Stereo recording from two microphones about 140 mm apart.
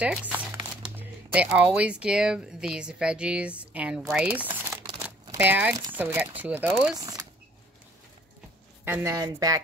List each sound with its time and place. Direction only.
0.3 s speech: 10° right (ahead or behind)
7.0 s a sound: 25° right (ahead or behind)
8.8 s speech: 15° right (ahead or behind)
9.1 s speech: 25° right (ahead or behind)